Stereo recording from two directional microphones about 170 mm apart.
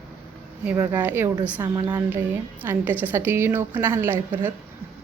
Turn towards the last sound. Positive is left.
turn(degrees=-15)  # may be behind; listen again after turning